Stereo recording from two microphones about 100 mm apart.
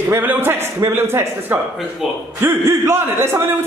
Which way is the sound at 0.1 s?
20° right (ahead or behind).